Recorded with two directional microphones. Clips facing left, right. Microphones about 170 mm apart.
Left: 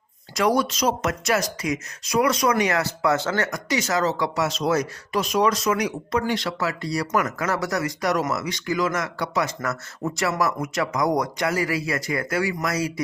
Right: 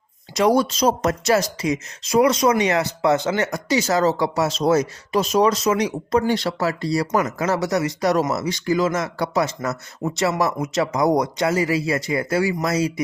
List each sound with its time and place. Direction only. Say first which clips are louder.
0.3 s speech: right 4 dB; 25° right (ahead or behind)